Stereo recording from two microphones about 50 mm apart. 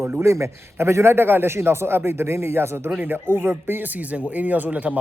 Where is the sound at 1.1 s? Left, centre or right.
Right.